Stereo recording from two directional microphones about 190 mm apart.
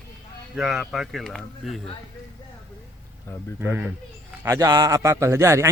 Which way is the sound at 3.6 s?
10° right (ahead or behind).